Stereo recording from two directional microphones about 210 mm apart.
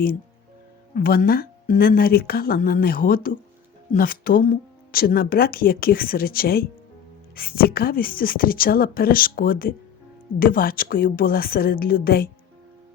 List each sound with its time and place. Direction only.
0.9 s speech: 45° left (ahead or behind)